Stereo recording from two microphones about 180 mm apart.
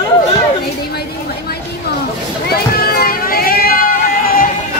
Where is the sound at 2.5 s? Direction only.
60° left (ahead or behind).